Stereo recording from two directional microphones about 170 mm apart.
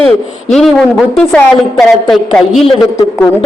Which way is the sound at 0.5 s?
Centre (ahead or behind).